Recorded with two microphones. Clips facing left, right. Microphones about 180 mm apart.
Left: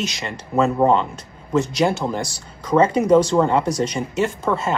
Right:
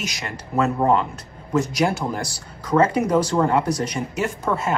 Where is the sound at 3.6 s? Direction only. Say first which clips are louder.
Left 2 dB; 25° left (ahead or behind).